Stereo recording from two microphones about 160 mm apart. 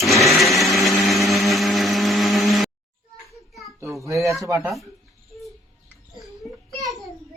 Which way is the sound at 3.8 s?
20° right (ahead or behind).